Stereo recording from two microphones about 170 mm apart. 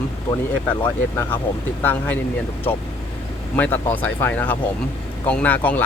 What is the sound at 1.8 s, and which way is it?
Speech, 10° left (ahead or behind).